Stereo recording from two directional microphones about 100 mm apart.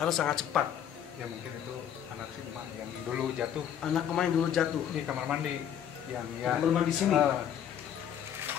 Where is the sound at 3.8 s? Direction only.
5° left (ahead or behind).